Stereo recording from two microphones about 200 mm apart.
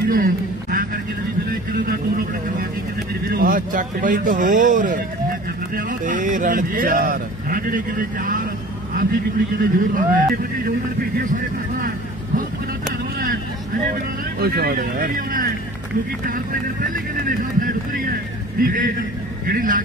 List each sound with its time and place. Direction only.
0.1 s a sound: 45° right (ahead or behind)
1.5 s vehicle: 45° right (ahead or behind)
3.3 s speech: 45° right (ahead or behind)
13.8 s speech: 45° right (ahead or behind)
16.8 s speech: 40° right (ahead or behind)